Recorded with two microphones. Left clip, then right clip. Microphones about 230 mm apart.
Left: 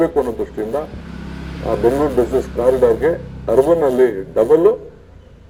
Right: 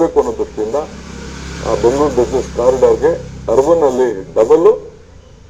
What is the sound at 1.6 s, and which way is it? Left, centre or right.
Speech, left.